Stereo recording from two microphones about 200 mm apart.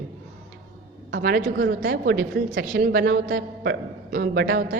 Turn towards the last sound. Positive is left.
turn(degrees=-50)  # may be behind; listen again after turning